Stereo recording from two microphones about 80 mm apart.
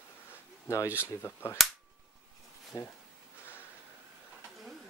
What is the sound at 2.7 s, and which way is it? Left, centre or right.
Speech, left.